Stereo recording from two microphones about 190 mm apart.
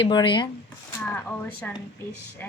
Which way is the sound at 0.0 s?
25° left (ahead or behind).